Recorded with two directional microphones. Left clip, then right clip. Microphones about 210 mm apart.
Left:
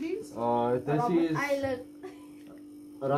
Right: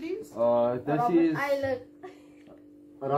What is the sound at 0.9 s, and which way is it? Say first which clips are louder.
Speech: right 6 dB; 10° left (ahead or behind).